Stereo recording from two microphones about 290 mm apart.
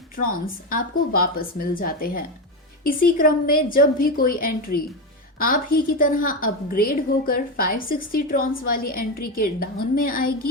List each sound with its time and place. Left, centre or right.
0.2 s a woman's voice: left